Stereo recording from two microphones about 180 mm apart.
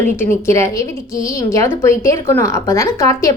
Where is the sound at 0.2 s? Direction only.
15° left (ahead or behind).